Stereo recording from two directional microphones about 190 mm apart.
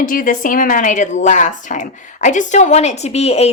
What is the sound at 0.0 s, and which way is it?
Speech, 45° left (ahead or behind).